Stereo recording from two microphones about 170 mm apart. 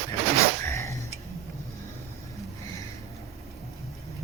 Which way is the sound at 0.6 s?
15° left (ahead or behind).